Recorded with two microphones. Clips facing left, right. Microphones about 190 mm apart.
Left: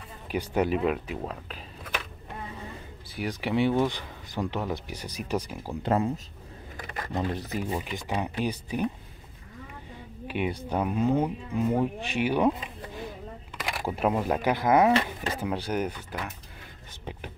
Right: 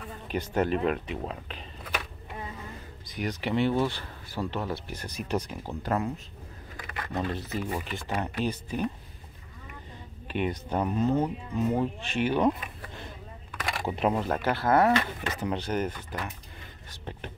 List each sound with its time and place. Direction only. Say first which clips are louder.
0.3 s speech: left 1 dB; 10° left (ahead or behind)
3.1 s speech: left 1 dB; 10° left (ahead or behind)
5.8 s speech: left 4 dB; 25° left (ahead or behind)
7.1 s speech: left 1 dB; 15° left (ahead or behind)
10.2 s speech: even; 10° left (ahead or behind)
13.7 s speech: even; 5° left (ahead or behind)
15.0 s speech: left 2 dB; 30° left (ahead or behind)
15.4 s speech: even; 10° left (ahead or behind)